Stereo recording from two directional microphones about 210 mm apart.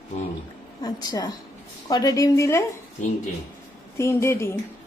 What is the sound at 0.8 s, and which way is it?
A woman's voice, 20° left (ahead or behind).